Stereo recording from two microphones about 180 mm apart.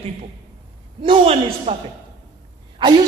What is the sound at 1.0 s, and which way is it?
Speech, 30° right (ahead or behind).